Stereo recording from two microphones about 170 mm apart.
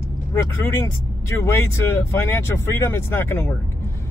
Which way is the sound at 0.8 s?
15° left (ahead or behind).